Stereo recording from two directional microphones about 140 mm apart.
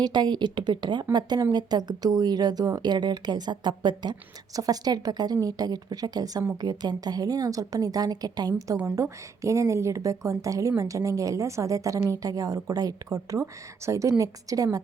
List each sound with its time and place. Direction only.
0.0 s a woman's voice: 30° right (ahead or behind)